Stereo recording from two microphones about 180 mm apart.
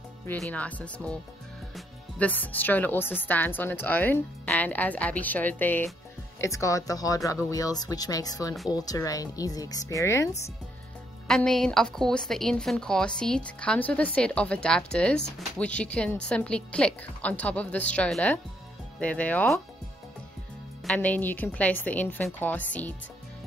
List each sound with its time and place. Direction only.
0.3 s speech: 10° left (ahead or behind)
2.1 s speech: 10° left (ahead or behind)
11.2 s a woman's voice: centre (ahead or behind)
20.8 s speech: 5° left (ahead or behind)